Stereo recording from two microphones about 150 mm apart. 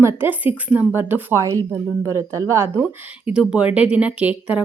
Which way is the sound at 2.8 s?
5° right (ahead or behind).